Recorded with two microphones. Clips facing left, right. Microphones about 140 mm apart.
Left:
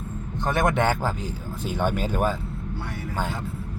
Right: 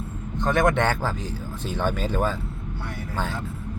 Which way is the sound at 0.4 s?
10° left (ahead or behind).